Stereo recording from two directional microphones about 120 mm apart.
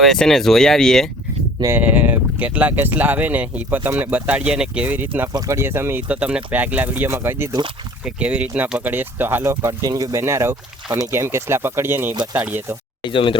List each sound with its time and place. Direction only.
0.0 s speech: 5° left (ahead or behind)
1.6 s speech: 15° right (ahead or behind)
13.1 s speech: 45° left (ahead or behind)